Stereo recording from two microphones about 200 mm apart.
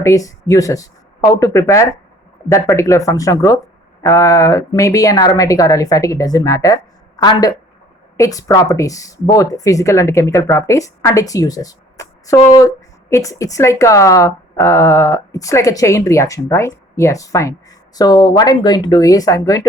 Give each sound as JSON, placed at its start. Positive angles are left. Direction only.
{"t": 0.0, "sound": "speech", "side_deg": 15}